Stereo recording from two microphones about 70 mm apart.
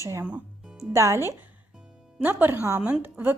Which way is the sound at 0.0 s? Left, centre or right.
Right.